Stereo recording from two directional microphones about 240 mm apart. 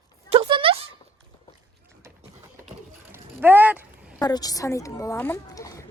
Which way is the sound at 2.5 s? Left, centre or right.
Centre.